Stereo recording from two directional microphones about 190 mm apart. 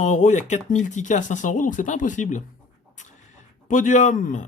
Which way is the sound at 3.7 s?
40° left (ahead or behind).